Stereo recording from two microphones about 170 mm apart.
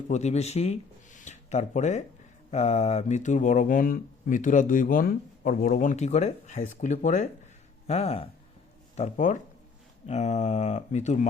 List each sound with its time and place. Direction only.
0.1 s speech: 40° left (ahead or behind)
9.0 s speech: 45° left (ahead or behind)